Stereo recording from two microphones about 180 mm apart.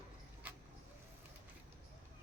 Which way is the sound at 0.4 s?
10° right (ahead or behind).